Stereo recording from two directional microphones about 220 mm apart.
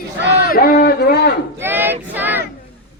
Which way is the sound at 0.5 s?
40° left (ahead or behind).